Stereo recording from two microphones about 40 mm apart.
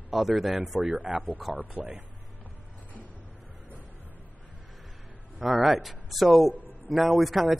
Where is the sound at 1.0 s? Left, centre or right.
Right.